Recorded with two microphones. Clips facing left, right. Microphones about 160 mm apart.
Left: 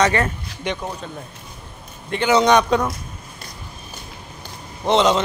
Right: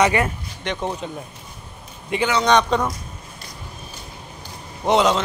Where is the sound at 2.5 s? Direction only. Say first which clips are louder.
Left 1 dB; 5° left (ahead or behind).